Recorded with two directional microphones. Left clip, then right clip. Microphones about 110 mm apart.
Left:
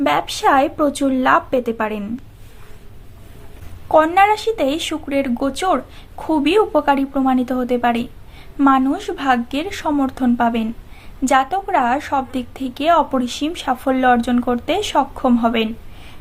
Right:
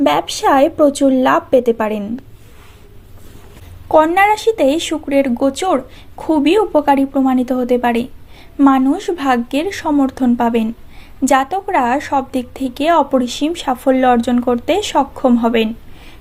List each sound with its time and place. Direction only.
0.0 s a woman's voice: 25° right (ahead or behind)
3.8 s a woman's voice: 25° right (ahead or behind)